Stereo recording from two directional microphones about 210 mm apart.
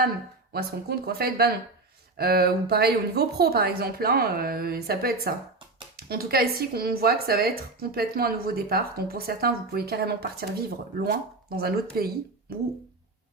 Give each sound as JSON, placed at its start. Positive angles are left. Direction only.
{"t": 0.5, "sound": "speech", "side_deg": -50}